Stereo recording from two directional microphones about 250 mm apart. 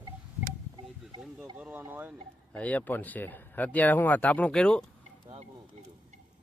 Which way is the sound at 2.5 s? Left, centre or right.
Centre.